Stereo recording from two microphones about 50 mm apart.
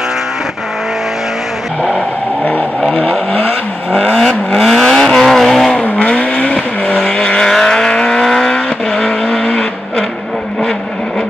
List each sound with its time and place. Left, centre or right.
1.8 s vehicle: centre
3.1 s vehicle: left
4.6 s vehicle: centre
5.9 s vehicle: left